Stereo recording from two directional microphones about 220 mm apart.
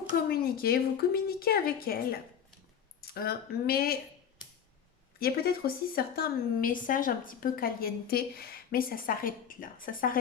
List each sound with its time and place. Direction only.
0.3 s a woman's voice: 45° left (ahead or behind)
5.2 s a woman's voice: 45° left (ahead or behind)